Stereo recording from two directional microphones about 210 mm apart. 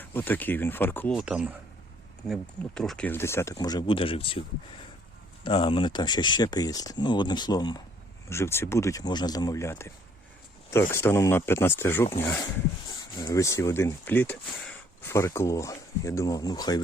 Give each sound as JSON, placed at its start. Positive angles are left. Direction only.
{"t": 0.1, "sound": "speech", "side_deg": 10}